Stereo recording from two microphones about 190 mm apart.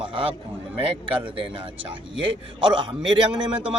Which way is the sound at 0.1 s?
30° right (ahead or behind).